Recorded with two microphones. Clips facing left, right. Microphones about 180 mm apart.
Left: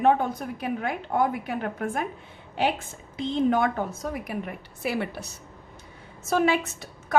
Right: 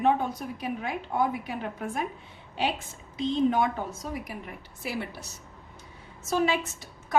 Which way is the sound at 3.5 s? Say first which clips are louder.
Left 3 dB; 55° left (ahead or behind).